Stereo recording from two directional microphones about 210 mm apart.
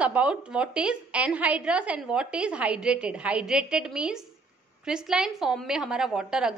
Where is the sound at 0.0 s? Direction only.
5° right (ahead or behind).